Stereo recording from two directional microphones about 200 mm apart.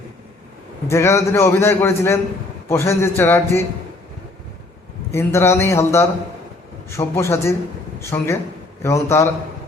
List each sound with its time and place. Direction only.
0.9 s a man's voice: 15° left (ahead or behind)
5.1 s a man's voice: 15° left (ahead or behind)